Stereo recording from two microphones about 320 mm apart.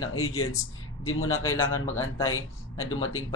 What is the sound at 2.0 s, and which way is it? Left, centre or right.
Speech, centre.